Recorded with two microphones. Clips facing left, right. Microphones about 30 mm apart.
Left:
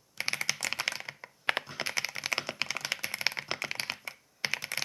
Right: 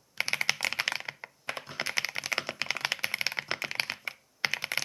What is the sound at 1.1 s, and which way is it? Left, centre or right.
Computer keyboard, centre.